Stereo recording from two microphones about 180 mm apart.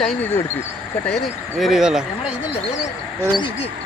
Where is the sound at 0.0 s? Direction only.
10° left (ahead or behind).